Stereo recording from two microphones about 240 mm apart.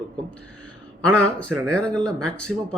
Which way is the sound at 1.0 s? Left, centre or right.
Centre.